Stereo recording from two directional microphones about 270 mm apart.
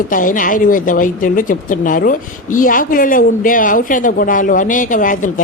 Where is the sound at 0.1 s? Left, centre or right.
Left.